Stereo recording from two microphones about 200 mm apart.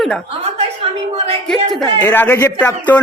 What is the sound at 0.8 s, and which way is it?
Speech, 30° right (ahead or behind).